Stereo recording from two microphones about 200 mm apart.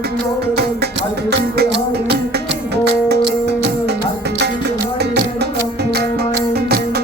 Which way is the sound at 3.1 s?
55° right (ahead or behind).